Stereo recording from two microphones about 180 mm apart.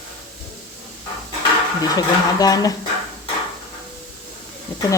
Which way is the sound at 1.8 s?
20° left (ahead or behind).